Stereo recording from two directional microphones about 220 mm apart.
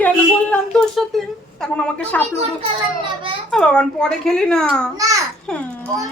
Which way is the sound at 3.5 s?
5° left (ahead or behind).